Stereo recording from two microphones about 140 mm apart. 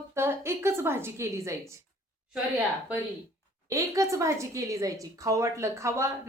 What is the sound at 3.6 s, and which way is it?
A woman's voice, 25° right (ahead or behind).